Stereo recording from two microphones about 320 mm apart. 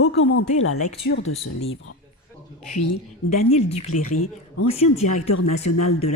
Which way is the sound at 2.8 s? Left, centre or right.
Left.